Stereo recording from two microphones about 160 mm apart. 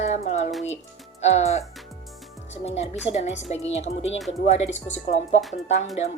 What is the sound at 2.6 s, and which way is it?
A woman's voice, 40° left (ahead or behind).